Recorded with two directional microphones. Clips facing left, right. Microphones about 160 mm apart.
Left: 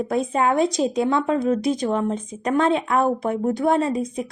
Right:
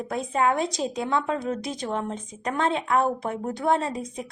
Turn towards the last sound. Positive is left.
turn(degrees=15)  # may be behind; listen again after turning